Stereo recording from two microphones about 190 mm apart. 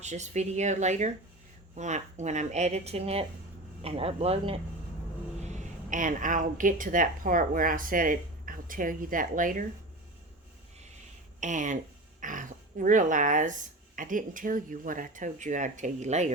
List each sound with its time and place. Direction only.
0.0 s a woman's voice: 40° right (ahead or behind)
11.3 s speech: 40° right (ahead or behind)